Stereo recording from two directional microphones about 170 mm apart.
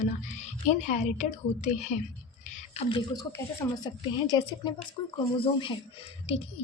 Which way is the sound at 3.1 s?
20° left (ahead or behind).